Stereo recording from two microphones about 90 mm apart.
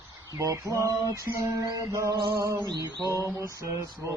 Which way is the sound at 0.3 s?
30° right (ahead or behind).